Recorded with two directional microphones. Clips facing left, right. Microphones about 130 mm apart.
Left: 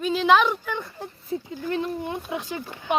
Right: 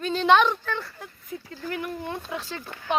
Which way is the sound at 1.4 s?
15° left (ahead or behind).